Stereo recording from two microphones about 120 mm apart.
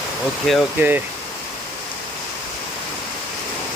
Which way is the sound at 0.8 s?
15° right (ahead or behind).